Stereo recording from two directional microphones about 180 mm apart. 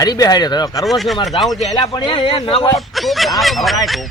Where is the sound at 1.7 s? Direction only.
20° left (ahead or behind).